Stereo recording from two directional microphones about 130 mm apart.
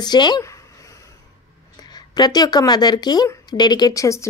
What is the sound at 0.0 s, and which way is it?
Speech, 35° left (ahead or behind).